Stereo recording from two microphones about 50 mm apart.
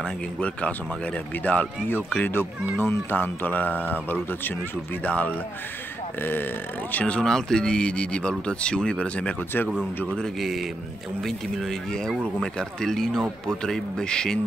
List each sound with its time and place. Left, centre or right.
0.0 s speech: left
2.8 s speech: left
5.0 s speech: left
6.2 s speech: left
7.2 s speech: centre
10.4 s speech: centre